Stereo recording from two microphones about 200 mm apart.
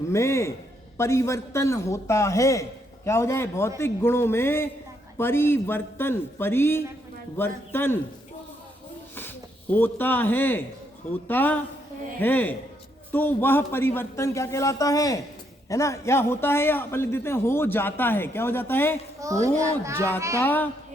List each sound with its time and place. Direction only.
0.1 s a man's voice: 15° left (ahead or behind)
9.1 s a man's voice: 10° left (ahead or behind)
19.2 s a child's voice: 15° right (ahead or behind)
20.4 s a man's voice: 10° left (ahead or behind)